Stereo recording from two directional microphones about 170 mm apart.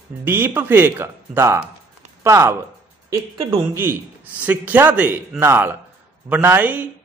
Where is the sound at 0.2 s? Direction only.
10° right (ahead or behind).